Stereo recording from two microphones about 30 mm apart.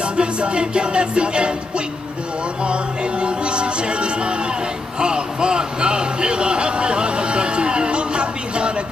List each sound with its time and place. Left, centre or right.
0.0 s music: right
2.6 s music: right
4.9 s a sound: right